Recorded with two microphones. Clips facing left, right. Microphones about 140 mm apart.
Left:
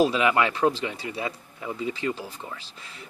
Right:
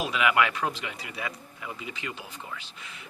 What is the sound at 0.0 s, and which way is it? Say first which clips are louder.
Speech: left 4 dB; 30° left (ahead or behind).